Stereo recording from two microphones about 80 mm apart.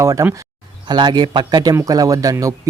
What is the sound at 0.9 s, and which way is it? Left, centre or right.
Speech, right.